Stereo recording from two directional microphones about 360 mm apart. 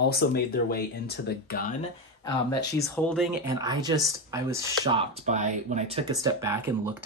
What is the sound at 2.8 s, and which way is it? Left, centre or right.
Speech, centre.